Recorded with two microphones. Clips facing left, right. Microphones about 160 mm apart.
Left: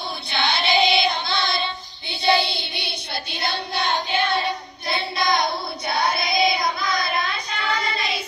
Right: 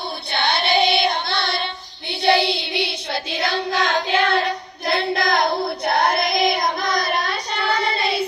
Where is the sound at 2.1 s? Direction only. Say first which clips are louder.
Right 3 dB; 90° right.